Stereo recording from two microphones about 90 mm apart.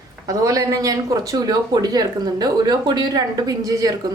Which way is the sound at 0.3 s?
40° right (ahead or behind).